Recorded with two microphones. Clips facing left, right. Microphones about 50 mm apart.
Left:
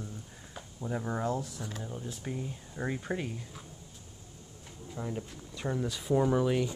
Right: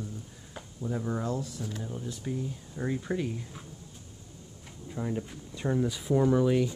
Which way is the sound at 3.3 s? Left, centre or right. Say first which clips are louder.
Right 4 dB; centre.